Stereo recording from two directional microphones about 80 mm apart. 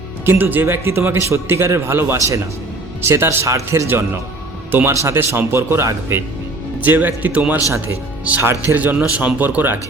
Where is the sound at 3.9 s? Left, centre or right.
Right.